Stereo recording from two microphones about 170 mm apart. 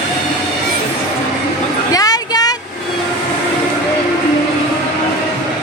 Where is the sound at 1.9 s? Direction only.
20° left (ahead or behind).